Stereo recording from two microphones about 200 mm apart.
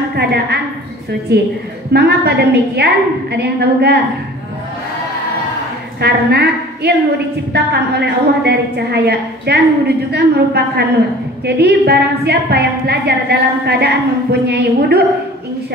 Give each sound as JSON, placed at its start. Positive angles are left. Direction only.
{"t": 0.1, "sound": "a woman's voice", "side_deg": -55}
{"t": 5.9, "sound": "a woman's voice", "side_deg": -55}